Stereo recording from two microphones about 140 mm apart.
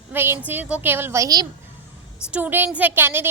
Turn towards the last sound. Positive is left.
turn(degrees=-15)  # may be behind; listen again after turning